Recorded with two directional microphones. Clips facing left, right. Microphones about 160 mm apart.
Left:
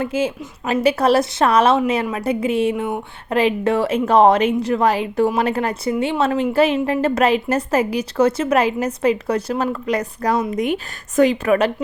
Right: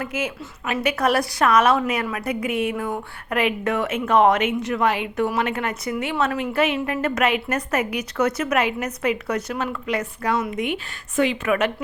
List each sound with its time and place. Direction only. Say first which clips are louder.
0.0 s a woman's voice: left 6 dB; 30° left (ahead or behind)